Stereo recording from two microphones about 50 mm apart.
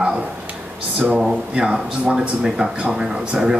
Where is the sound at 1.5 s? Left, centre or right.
Centre.